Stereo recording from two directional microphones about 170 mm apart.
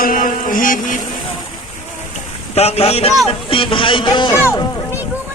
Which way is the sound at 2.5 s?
35° left (ahead or behind).